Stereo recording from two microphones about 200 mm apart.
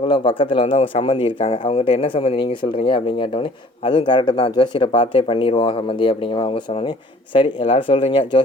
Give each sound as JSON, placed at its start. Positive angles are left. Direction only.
{"t": 0.1, "sound": "speech", "side_deg": 25}